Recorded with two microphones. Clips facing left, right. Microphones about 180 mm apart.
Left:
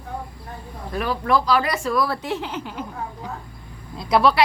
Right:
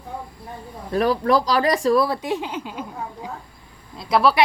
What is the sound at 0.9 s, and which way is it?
Speech, 40° right (ahead or behind).